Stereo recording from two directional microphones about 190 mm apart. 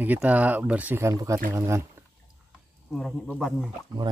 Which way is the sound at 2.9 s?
Centre (ahead or behind).